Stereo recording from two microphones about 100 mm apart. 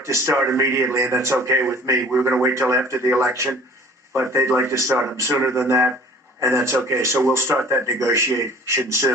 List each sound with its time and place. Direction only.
0.0 s speech: 25° right (ahead or behind)